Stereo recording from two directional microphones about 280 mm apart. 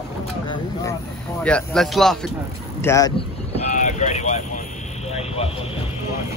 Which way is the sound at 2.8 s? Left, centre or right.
Centre.